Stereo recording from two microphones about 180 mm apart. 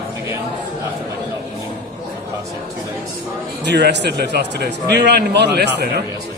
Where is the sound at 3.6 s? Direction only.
70° right (ahead or behind).